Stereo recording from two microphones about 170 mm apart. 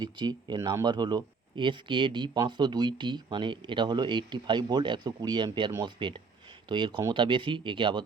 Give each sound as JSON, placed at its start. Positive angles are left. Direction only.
{"t": 0.0, "sound": "speech", "side_deg": -25}